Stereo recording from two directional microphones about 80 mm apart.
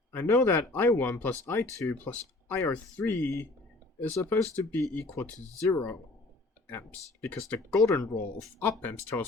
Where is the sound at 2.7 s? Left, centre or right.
Left.